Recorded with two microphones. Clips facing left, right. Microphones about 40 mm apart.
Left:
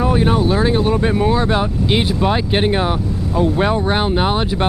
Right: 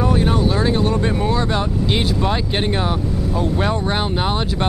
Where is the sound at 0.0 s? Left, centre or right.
Centre.